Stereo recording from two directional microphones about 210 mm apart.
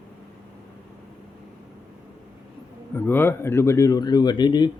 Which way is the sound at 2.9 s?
10° left (ahead or behind).